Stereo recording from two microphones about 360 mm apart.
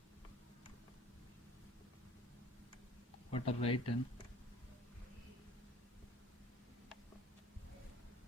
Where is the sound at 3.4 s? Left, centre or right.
Centre.